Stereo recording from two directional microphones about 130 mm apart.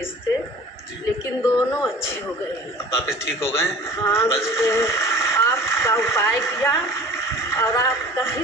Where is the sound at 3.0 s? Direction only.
5° right (ahead or behind).